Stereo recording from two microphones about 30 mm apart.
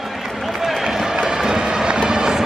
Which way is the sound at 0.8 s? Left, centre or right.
Right.